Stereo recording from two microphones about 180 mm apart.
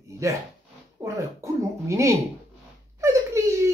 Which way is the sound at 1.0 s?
15° right (ahead or behind).